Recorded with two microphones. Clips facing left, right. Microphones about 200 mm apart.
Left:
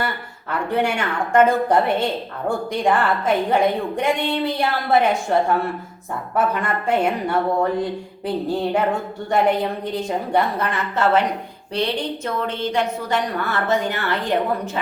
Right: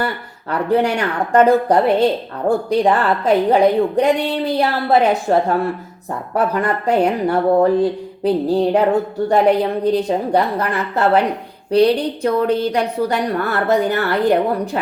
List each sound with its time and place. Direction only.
0.7 s a woman's voice: 35° right (ahead or behind)